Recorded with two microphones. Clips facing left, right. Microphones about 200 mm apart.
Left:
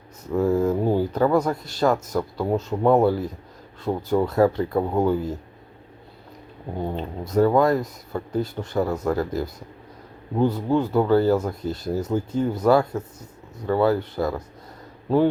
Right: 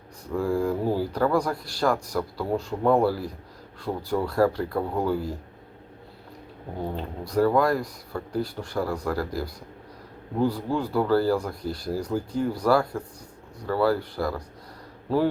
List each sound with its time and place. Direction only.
0.3 s speech: 20° left (ahead or behind)
6.9 s speech: 20° left (ahead or behind)